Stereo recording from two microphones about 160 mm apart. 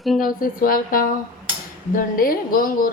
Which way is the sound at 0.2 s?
60° left (ahead or behind).